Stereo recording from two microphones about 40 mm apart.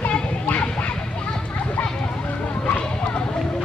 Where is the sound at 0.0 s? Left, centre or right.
Left.